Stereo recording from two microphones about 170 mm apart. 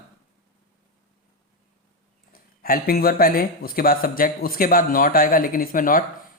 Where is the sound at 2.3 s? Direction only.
60° left (ahead or behind).